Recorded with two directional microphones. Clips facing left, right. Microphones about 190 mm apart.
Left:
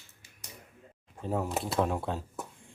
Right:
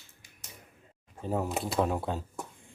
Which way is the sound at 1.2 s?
Centre (ahead or behind).